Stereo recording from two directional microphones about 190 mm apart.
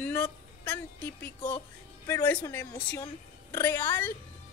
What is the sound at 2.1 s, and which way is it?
A woman's voice, 15° left (ahead or behind).